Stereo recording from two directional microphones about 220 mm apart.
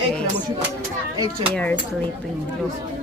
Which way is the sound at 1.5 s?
5° left (ahead or behind).